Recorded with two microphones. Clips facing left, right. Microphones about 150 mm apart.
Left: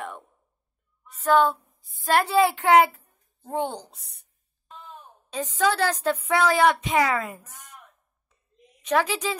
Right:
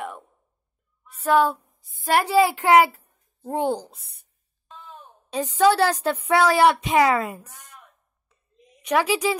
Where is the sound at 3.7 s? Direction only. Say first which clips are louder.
Right 7 dB; 30° right (ahead or behind).